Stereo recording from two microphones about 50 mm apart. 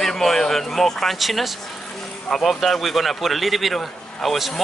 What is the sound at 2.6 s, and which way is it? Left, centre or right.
Speech, centre.